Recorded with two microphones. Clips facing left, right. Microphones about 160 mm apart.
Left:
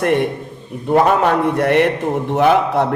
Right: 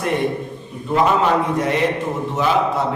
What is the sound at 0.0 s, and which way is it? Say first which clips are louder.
A man's voice: left 4 dB; 65° left (ahead or behind).